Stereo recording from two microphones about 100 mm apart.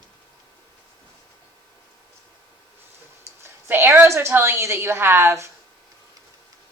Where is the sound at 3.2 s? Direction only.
25° right (ahead or behind).